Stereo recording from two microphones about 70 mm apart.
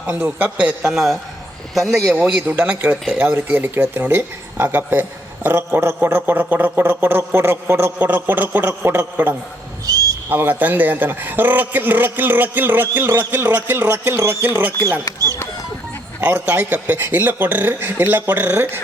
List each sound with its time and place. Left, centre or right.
0.1 s speech: right
0.9 s speech: centre
2.1 s speech: centre; by 7.9 s right
7.9 s speech: right
9.8 s a sound: right
10.2 s speech: right
16.2 s speech: right